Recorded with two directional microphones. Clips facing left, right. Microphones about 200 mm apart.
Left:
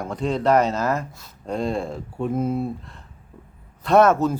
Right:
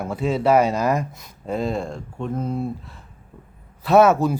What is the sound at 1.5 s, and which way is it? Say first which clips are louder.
A man's voice: even; centre (ahead or behind).